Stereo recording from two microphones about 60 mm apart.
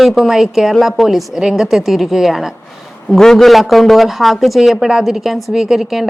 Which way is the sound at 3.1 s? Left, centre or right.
Centre.